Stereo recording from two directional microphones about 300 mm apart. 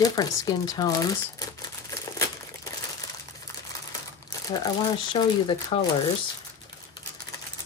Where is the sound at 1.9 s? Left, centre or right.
Centre.